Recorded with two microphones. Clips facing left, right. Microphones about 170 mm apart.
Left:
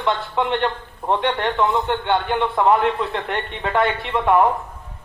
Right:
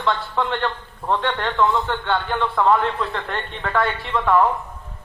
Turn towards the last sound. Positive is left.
turn(degrees=20)  # may be behind; listen again after turning